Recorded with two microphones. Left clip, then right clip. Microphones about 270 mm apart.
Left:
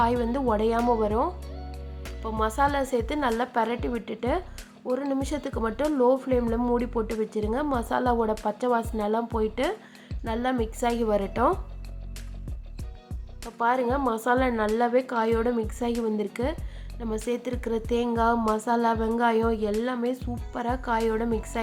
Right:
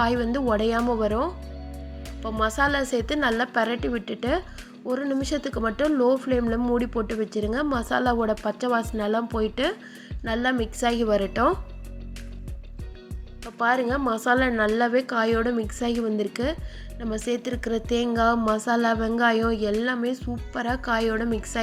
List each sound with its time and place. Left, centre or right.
0.0 s speech: centre
13.4 s speech: centre